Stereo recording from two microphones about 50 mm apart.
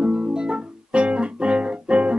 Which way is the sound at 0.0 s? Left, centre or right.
Centre.